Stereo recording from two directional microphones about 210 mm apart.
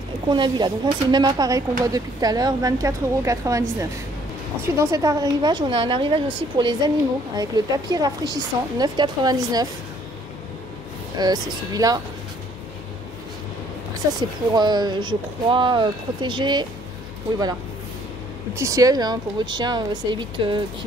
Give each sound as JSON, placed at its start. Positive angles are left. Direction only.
{"t": 0.3, "sound": "speech", "side_deg": -20}
{"t": 11.1, "sound": "speech", "side_deg": -20}
{"t": 14.5, "sound": "speech", "side_deg": -20}
{"t": 18.5, "sound": "speech", "side_deg": -15}